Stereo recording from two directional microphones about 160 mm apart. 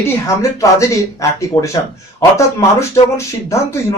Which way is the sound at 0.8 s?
20° left (ahead or behind).